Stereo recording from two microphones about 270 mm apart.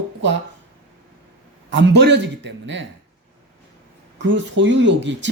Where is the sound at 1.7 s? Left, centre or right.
Right.